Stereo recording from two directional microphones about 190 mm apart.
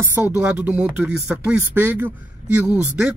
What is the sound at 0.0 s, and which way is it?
Speech, 10° right (ahead or behind).